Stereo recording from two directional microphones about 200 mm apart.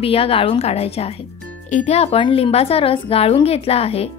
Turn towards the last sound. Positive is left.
turn(degrees=30)  # may be behind; listen again after turning